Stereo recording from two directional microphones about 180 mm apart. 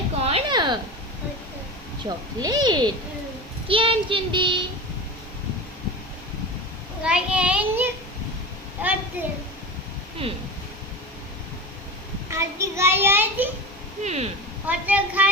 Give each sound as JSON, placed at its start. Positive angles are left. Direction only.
{"t": 0.2, "sound": "a sound", "side_deg": -35}
{"t": 2.0, "sound": "speech", "side_deg": -20}
{"t": 7.0, "sound": "a child's voice", "side_deg": -5}
{"t": 8.8, "sound": "a sound", "side_deg": -10}
{"t": 9.2, "sound": "a child's voice", "side_deg": -10}
{"t": 12.3, "sound": "a child's voice", "side_deg": -15}
{"t": 14.0, "sound": "speech", "side_deg": -40}
{"t": 14.7, "sound": "a child's voice", "side_deg": -10}